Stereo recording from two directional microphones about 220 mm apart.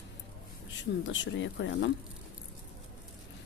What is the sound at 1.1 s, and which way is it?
Speech, 55° left (ahead or behind).